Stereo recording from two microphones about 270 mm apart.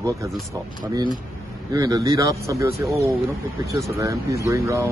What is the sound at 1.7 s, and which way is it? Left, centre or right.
Speech, centre.